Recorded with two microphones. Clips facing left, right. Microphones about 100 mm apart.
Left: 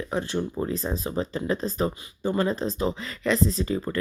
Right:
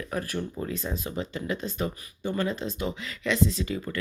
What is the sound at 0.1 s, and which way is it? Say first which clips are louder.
Speech: left 4 dB; 25° left (ahead or behind).